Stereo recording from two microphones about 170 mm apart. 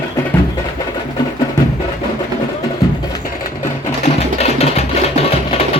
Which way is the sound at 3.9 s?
40° left (ahead or behind).